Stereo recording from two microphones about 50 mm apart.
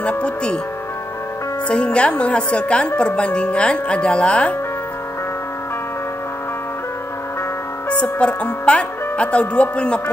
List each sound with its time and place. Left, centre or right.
0.2 s speech: left
1.7 s speech: left
8.0 s speech: left